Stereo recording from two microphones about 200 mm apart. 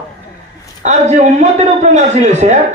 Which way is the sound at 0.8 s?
35° right (ahead or behind).